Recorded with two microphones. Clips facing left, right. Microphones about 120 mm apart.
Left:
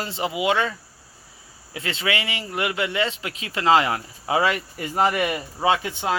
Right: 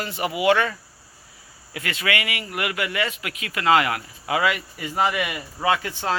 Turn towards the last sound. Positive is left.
turn(degrees=15)  # may be behind; listen again after turning